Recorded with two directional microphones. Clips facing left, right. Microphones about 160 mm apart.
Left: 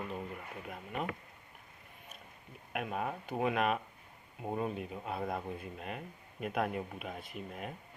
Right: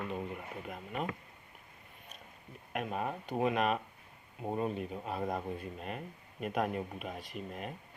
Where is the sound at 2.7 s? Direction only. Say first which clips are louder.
Right 1 dB; centre (ahead or behind).